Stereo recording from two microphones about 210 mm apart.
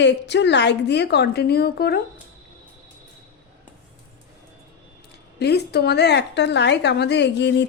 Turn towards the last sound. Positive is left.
turn(degrees=55)  # may be behind; listen again after turning